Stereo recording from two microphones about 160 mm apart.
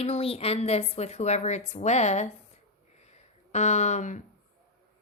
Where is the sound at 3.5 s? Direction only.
45° left (ahead or behind).